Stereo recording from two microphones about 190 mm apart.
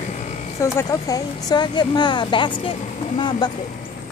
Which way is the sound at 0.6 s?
15° left (ahead or behind).